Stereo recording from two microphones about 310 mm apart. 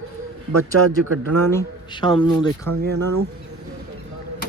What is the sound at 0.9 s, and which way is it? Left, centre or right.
Speech, right.